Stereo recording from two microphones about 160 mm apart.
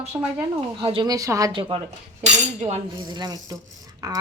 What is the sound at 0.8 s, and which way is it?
Speech, 35° right (ahead or behind).